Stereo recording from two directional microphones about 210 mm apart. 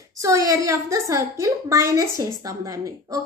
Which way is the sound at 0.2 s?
15° right (ahead or behind).